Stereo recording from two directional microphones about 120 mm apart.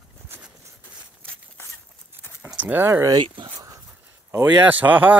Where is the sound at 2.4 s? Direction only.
15° right (ahead or behind).